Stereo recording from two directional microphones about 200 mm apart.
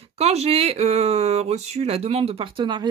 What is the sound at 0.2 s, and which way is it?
Speech, 30° right (ahead or behind).